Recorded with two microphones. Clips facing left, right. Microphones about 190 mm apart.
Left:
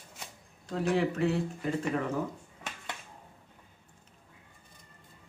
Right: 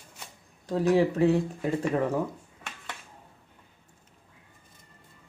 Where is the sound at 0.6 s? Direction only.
35° right (ahead or behind).